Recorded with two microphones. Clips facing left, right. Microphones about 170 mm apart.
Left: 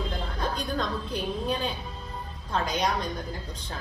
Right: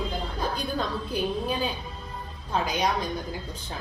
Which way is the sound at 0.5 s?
5° right (ahead or behind).